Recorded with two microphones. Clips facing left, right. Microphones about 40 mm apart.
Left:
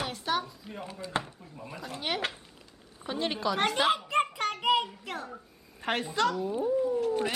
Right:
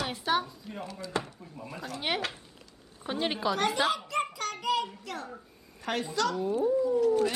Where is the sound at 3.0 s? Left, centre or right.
Centre.